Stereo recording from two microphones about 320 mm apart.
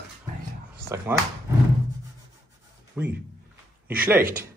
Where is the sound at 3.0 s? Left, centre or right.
Centre.